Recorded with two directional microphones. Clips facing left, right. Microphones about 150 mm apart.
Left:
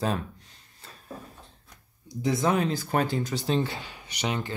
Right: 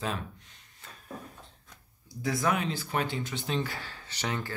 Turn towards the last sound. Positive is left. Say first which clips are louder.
# left 4 dB
turn(degrees=20)  # may be behind; listen again after turning